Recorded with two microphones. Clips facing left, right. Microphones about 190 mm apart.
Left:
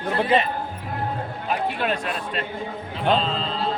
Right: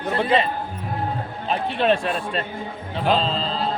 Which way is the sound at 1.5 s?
25° right (ahead or behind).